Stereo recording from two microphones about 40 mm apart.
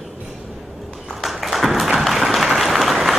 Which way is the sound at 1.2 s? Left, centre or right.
Centre.